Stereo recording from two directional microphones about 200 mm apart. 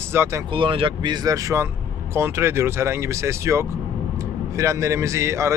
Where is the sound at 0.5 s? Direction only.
25° right (ahead or behind).